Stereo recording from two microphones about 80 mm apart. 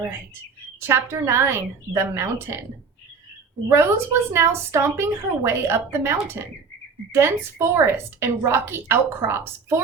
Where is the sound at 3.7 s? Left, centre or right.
Right.